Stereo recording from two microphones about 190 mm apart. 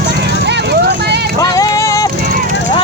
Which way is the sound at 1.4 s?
20° left (ahead or behind).